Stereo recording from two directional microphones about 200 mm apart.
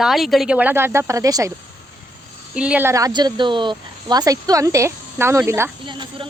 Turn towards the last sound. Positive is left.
turn(degrees=-25)  # may be behind; listen again after turning